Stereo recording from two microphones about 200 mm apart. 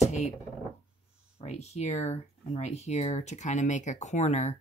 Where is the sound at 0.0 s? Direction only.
35° left (ahead or behind).